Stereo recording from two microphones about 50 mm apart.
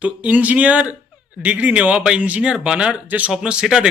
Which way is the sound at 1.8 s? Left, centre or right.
Centre.